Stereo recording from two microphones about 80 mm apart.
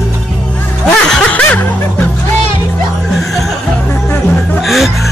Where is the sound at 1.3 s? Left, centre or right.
Centre.